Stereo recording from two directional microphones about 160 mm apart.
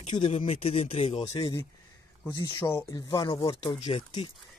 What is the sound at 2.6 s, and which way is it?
Speech, 10° left (ahead or behind).